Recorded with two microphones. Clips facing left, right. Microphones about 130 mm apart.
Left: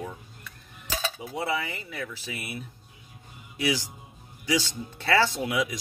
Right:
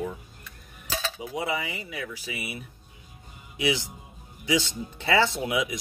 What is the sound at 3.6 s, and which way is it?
Speech, 20° right (ahead or behind).